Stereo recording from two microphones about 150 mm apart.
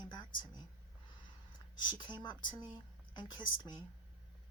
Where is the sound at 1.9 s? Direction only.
30° left (ahead or behind).